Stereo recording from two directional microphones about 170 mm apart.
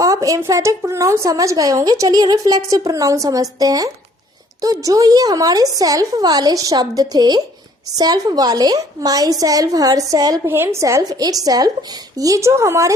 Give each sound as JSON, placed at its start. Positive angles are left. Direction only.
{"t": 0.0, "sound": "a woman's voice", "side_deg": -20}